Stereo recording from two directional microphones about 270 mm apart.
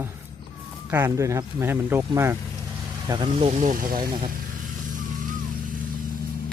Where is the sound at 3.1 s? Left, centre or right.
Centre.